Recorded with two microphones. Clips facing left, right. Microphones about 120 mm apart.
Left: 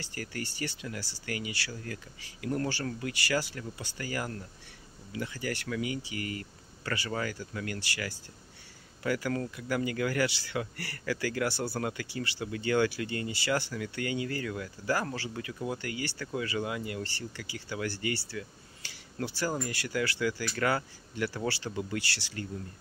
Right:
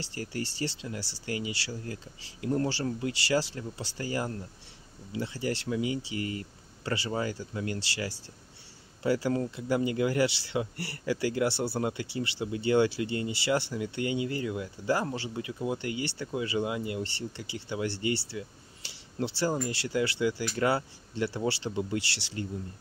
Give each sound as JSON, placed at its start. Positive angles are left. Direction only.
{"t": 0.0, "sound": "speech", "side_deg": -25}